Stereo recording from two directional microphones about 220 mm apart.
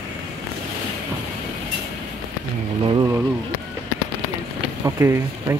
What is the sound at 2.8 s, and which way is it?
Vehicle, 20° right (ahead or behind).